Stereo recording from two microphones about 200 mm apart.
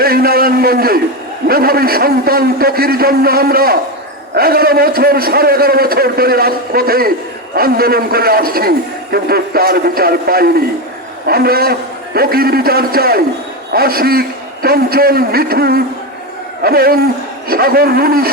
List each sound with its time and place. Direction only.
0.0 s a man's voice: 50° right (ahead or behind)